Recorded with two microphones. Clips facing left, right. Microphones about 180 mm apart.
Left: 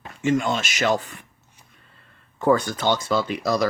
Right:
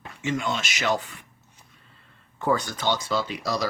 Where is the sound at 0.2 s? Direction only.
50° left (ahead or behind).